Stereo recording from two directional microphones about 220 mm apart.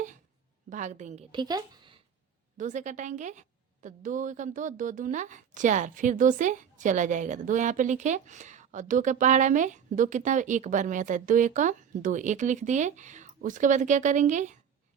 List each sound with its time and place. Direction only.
0.7 s a woman's voice: 35° right (ahead or behind); by 2.0 s 20° right (ahead or behind)
2.6 s a woman's voice: 35° right (ahead or behind)